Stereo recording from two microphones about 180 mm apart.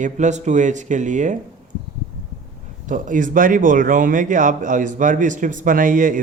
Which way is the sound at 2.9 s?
45° right (ahead or behind).